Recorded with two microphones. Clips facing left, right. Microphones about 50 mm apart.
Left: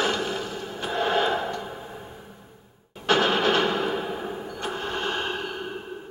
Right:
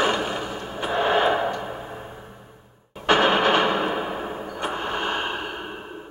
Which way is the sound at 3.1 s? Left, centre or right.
Right.